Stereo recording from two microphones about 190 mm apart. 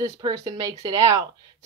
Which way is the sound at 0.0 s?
20° right (ahead or behind).